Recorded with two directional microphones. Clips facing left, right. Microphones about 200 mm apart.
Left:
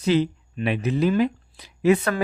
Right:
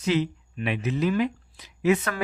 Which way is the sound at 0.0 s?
35° left (ahead or behind).